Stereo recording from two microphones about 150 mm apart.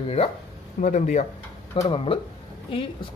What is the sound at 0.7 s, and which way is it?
Speech, 55° left (ahead or behind).